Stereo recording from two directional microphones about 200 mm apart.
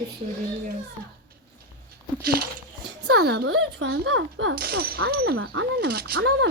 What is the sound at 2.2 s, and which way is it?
Speech, 50° right (ahead or behind).